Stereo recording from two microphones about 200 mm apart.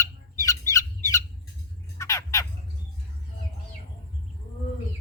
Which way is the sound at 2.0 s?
15° left (ahead or behind).